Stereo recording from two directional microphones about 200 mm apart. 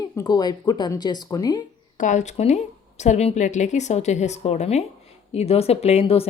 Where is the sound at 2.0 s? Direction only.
40° left (ahead or behind).